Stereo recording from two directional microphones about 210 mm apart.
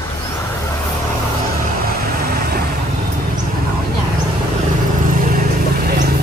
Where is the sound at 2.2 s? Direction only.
50° right (ahead or behind).